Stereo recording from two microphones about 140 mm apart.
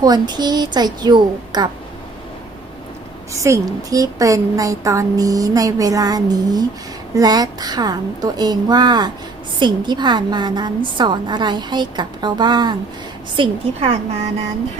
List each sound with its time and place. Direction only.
0.0 s a woman's voice: 30° right (ahead or behind)
3.4 s a woman's voice: 25° right (ahead or behind)